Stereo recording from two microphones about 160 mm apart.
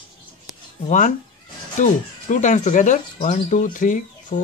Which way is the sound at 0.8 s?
55° left (ahead or behind).